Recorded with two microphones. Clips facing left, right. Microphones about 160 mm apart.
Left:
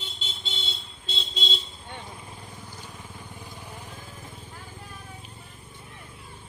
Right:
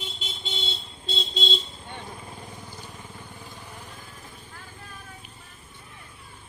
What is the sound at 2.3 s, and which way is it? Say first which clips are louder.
Vehicle: right 2 dB; 10° right (ahead or behind).